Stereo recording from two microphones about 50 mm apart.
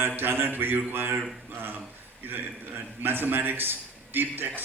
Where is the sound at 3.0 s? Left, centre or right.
Right.